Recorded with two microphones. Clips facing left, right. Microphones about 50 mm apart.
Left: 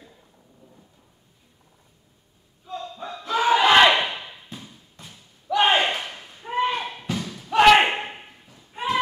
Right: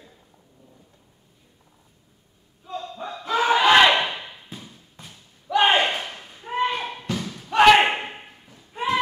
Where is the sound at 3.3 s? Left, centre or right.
Centre.